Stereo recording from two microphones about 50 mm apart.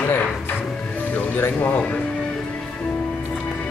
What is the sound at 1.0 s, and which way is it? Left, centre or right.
Music, left.